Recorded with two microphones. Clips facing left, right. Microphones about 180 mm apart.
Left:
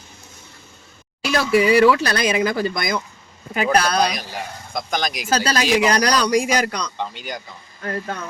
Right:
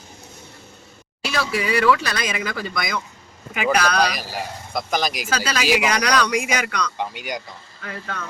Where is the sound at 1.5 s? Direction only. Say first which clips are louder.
Left 9 dB; 55° left (ahead or behind).